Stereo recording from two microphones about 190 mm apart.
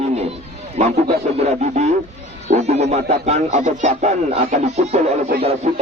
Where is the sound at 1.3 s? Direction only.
35° right (ahead or behind).